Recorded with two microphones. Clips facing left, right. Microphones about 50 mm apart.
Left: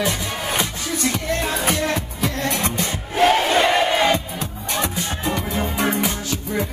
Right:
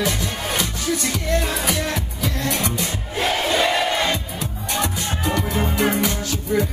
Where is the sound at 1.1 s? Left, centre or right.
Left.